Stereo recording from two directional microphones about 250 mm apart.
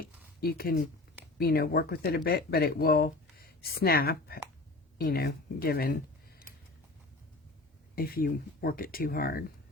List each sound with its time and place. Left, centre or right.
0.3 s speech: left
7.9 s speech: left